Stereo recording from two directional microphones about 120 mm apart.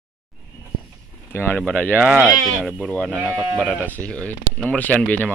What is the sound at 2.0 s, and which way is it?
Speech, 15° right (ahead or behind).